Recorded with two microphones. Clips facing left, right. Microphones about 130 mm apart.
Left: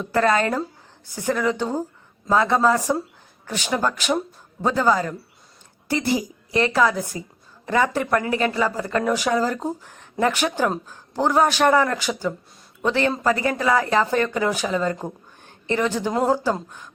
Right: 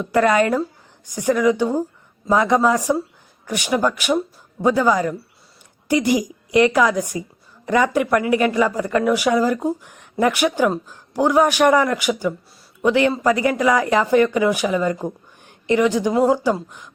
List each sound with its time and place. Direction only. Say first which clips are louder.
0.0 s a woman's voice: right 3 dB; 15° right (ahead or behind)